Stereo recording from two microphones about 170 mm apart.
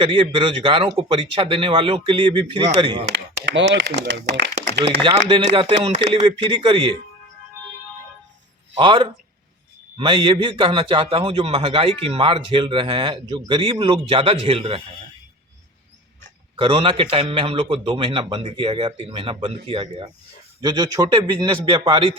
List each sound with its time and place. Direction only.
0.0 s a man's voice: 30° right (ahead or behind)
3.4 s speech: 90° right
4.8 s a man's voice: 30° right (ahead or behind)
8.7 s a man's voice: 30° right (ahead or behind)
16.6 s a man's voice: 30° right (ahead or behind)